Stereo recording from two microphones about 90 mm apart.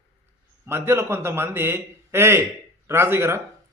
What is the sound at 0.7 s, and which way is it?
A man's voice, 30° right (ahead or behind).